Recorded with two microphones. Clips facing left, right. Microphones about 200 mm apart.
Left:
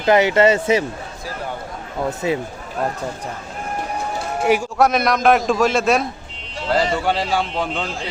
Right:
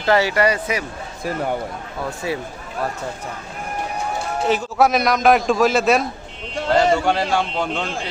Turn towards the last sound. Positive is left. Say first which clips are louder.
# even
turn(degrees=0)  # may be behind; listen again after turning